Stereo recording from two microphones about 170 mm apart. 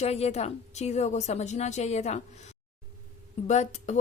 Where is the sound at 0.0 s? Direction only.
40° left (ahead or behind).